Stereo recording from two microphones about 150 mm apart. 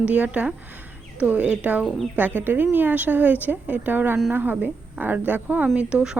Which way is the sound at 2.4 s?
10° right (ahead or behind).